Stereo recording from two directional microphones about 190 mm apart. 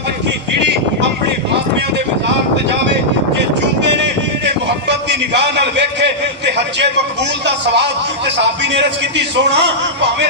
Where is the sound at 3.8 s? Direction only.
65° right (ahead or behind).